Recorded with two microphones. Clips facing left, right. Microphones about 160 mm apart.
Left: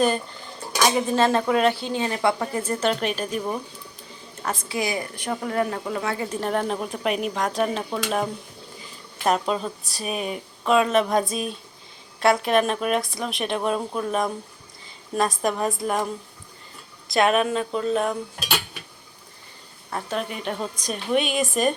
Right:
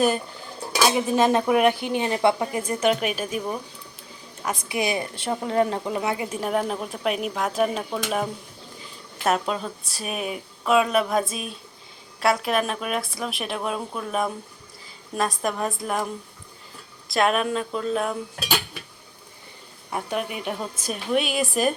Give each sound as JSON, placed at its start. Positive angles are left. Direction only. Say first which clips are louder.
{"t": 0.7, "sound": "speech", "louder": "even", "side_deg": -5}
{"t": 4.4, "sound": "a woman's voice", "louder": "right 1 dB", "side_deg": -20}
{"t": 6.2, "sound": "speech", "louder": "even", "side_deg": -10}
{"t": 17.1, "sound": "speech", "louder": "left 2 dB", "side_deg": 0}
{"t": 19.9, "sound": "speech", "louder": "right 1 dB", "side_deg": -10}